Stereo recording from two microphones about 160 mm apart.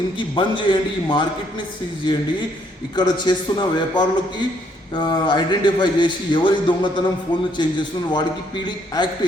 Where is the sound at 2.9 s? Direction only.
25° left (ahead or behind).